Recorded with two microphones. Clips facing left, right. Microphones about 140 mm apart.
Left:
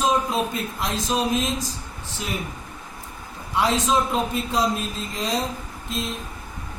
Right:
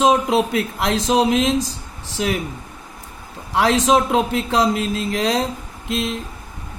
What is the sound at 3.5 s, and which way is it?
Speech, 85° right.